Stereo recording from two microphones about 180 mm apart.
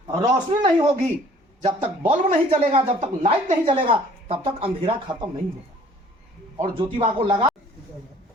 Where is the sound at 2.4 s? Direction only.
30° right (ahead or behind).